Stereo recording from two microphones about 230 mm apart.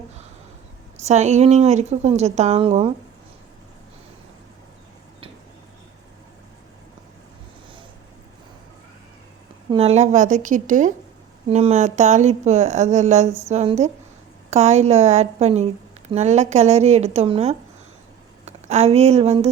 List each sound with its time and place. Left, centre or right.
1.0 s a woman's voice: right
9.6 s a woman's voice: right